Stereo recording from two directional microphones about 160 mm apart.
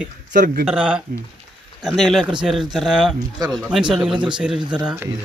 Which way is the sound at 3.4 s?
25° right (ahead or behind).